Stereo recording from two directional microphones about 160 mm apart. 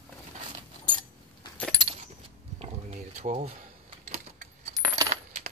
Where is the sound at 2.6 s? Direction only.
45° right (ahead or behind).